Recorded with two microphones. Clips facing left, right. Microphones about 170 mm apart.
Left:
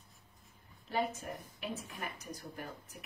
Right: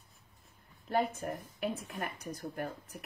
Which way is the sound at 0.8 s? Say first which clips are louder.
Right 4 dB; 50° right (ahead or behind).